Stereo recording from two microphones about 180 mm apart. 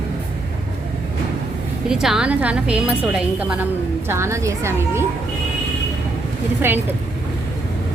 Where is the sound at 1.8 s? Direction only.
5° right (ahead or behind).